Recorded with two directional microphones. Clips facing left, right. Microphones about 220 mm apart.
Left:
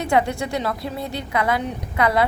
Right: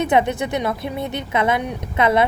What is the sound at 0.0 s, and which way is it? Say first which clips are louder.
A woman's voice: right 2 dB; 20° right (ahead or behind).